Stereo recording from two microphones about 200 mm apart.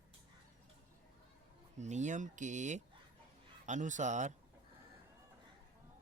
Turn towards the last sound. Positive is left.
turn(degrees=-40)  # may be behind; listen again after turning